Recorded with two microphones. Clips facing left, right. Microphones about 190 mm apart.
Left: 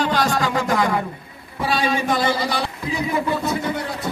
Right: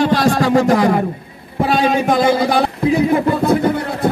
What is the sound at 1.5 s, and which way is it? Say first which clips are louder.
A man's voice: right 6 dB; 50° right (ahead or behind).